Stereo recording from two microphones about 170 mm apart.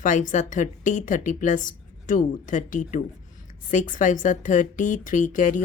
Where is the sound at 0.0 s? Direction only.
50° left (ahead or behind).